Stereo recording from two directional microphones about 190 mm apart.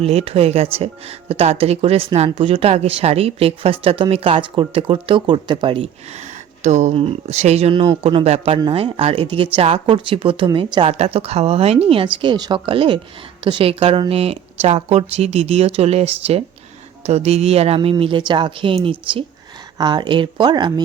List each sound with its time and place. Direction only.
0.0 s speech: 35° right (ahead or behind)
17.1 s speech: 35° right (ahead or behind)